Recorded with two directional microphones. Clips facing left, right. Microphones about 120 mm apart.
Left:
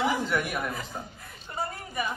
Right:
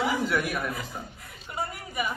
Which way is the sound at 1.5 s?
10° right (ahead or behind).